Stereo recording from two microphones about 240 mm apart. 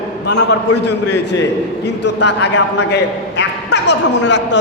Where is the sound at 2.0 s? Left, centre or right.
Left.